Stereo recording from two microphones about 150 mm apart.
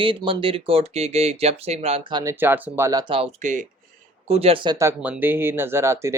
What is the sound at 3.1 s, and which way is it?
Speech, 45° right (ahead or behind).